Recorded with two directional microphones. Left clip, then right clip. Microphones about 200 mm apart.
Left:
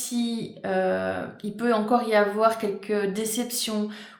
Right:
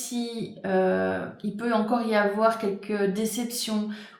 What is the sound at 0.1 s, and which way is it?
Speech, 40° left (ahead or behind).